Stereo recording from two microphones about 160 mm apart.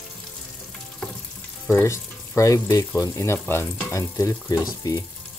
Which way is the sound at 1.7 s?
15° left (ahead or behind).